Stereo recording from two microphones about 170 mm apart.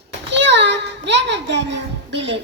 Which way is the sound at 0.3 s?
90° right.